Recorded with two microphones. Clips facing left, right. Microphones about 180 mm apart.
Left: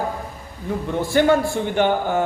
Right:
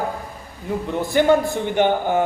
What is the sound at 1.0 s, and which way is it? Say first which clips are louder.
A man's voice: even; 20° right (ahead or behind).